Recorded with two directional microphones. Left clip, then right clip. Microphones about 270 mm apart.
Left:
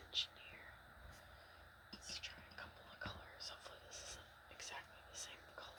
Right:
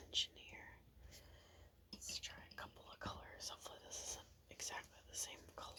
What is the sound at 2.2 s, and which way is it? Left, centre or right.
Whispering, right.